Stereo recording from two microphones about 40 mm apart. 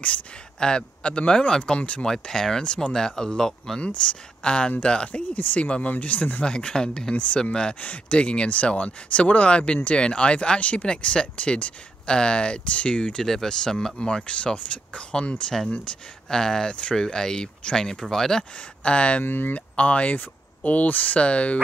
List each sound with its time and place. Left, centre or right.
0.6 s speech: left
2.0 s speech: centre
4.4 s speech: left
6.4 s speech: left
7.8 s speech: left
13.2 s speech: centre
16.3 s speech: centre
18.8 s speech: left
19.2 s speech: left
19.7 s speech: left
21.2 s speech: left